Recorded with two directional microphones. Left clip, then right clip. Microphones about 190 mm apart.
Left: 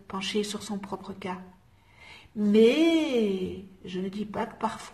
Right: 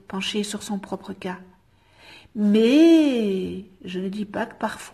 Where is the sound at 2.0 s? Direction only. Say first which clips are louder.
Right 5 dB; 50° right (ahead or behind).